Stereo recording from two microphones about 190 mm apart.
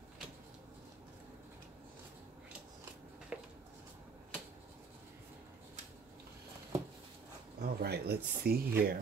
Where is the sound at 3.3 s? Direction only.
5° right (ahead or behind).